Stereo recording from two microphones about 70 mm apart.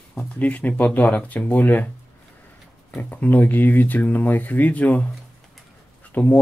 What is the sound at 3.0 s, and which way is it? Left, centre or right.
Speech, left.